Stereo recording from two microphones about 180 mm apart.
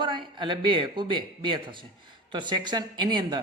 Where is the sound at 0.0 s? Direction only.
25° right (ahead or behind).